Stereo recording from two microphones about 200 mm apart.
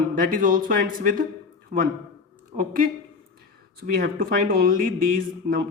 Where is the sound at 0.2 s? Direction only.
45° right (ahead or behind).